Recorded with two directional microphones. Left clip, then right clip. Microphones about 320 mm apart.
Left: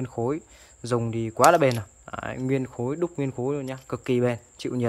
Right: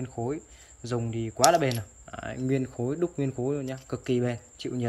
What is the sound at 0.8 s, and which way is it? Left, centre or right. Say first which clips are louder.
Speech: left 5 dB; centre.